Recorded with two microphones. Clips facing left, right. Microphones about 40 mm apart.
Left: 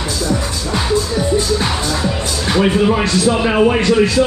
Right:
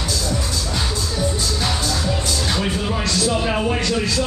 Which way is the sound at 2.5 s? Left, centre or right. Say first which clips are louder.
Left 13 dB; left.